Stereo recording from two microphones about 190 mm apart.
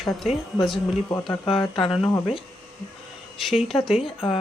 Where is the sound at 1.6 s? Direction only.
25° left (ahead or behind).